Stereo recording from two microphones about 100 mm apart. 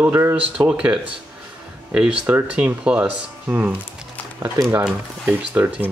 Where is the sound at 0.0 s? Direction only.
20° right (ahead or behind).